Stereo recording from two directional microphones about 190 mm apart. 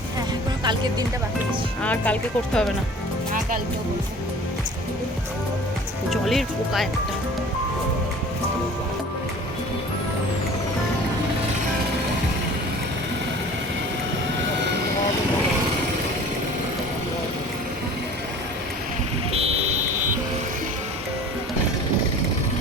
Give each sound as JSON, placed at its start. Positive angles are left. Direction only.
{"t": 0.6, "sound": "speech", "side_deg": -25}
{"t": 1.8, "sound": "speech", "side_deg": 5}
{"t": 6.1, "sound": "speech", "side_deg": 0}
{"t": 19.3, "sound": "vehicle", "side_deg": -35}